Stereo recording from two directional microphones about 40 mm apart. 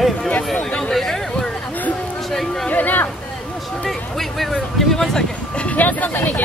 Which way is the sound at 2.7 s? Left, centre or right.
Left.